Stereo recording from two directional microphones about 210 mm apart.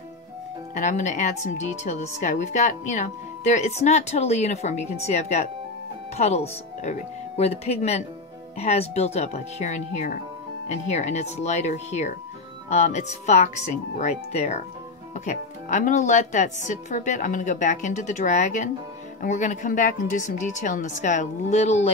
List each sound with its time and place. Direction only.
0.7 s speech: 35° left (ahead or behind)